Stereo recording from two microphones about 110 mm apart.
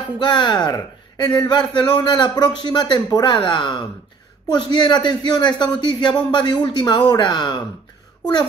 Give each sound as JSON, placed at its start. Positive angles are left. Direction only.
{"t": 0.2, "sound": "a man's voice", "side_deg": 45}